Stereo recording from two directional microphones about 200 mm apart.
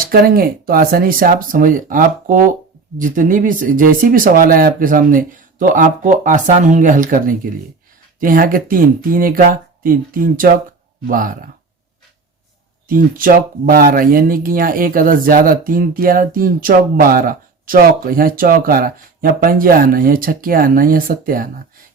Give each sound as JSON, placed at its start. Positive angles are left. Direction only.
{"t": 0.0, "sound": "speech", "side_deg": -45}
{"t": 12.9, "sound": "speech", "side_deg": -45}